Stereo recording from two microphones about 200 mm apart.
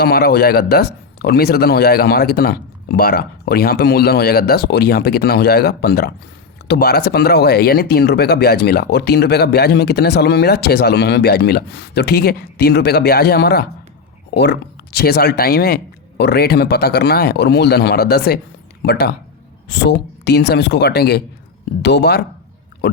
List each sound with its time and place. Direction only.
0.0 s speech: 50° left (ahead or behind)